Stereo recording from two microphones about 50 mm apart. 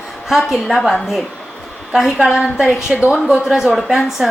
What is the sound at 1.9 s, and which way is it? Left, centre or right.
Speech, centre.